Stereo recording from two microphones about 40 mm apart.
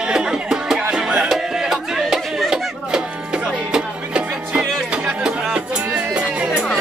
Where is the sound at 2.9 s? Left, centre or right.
Right.